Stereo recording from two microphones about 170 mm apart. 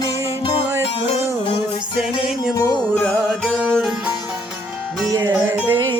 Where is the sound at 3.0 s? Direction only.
5° left (ahead or behind).